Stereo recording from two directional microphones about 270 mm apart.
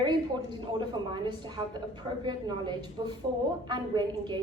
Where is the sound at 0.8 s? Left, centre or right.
Centre.